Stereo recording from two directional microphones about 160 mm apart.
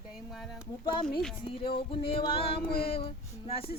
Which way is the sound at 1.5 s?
35° left (ahead or behind).